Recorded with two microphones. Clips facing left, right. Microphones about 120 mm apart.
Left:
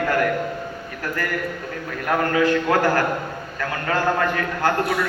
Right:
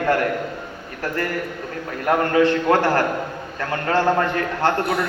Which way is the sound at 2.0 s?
30° right (ahead or behind).